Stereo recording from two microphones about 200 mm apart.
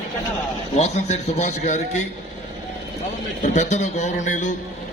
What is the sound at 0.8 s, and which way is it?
A man's voice, 35° left (ahead or behind).